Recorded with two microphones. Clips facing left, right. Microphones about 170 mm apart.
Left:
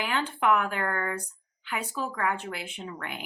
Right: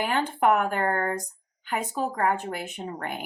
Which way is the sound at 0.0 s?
45° right (ahead or behind).